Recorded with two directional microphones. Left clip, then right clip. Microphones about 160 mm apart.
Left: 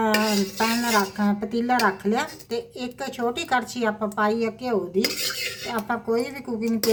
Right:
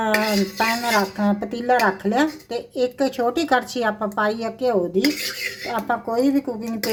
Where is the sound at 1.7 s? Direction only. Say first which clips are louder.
Right 4 dB; 45° right (ahead or behind).